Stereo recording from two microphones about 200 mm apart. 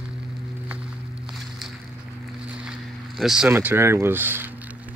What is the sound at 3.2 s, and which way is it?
Speech, 5° right (ahead or behind).